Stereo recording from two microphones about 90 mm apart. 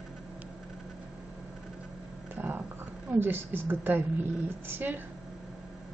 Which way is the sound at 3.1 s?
25° right (ahead or behind).